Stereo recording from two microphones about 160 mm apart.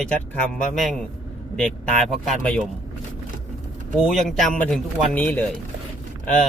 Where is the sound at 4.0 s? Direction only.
Centre (ahead or behind).